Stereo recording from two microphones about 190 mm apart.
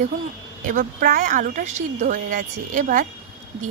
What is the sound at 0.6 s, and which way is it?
A woman's voice, 45° right (ahead or behind).